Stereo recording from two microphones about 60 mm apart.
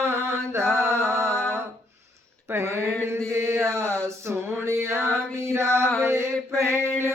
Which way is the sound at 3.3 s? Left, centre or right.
Right.